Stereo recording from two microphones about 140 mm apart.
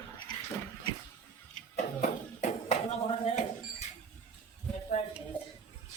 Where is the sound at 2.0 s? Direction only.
60° left (ahead or behind).